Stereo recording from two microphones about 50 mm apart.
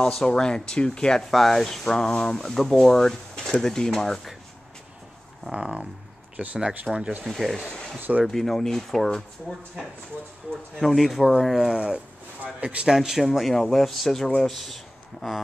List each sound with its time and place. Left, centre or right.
0.0 s speech: centre
1.3 s speech: centre
5.4 s speech: centre
7.2 s speech: centre
11.7 s speech: centre
12.9 s speech: centre